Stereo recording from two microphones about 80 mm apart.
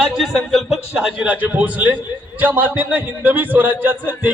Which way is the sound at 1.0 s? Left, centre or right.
Centre.